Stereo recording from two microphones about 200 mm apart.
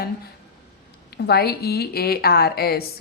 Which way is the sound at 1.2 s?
50° left (ahead or behind).